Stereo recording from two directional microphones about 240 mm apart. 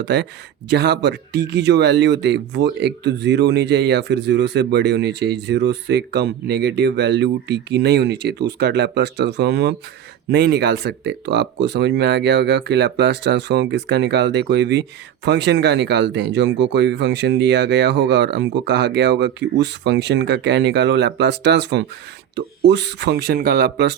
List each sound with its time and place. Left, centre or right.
0.0 s speech: right